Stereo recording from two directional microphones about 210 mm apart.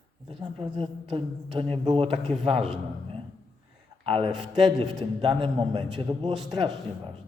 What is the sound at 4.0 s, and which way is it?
A man's voice, 25° right (ahead or behind).